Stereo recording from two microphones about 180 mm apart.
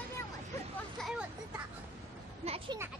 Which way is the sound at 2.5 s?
30° right (ahead or behind).